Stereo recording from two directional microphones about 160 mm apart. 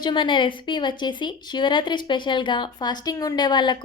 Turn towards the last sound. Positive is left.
turn(degrees=30)  # may be behind; listen again after turning